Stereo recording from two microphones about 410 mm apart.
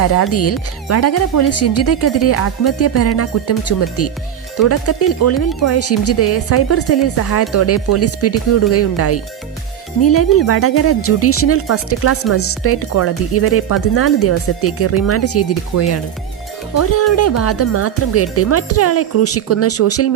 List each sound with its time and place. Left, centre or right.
0.0 s speech: left